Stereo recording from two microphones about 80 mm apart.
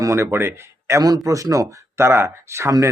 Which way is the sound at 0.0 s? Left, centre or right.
Right.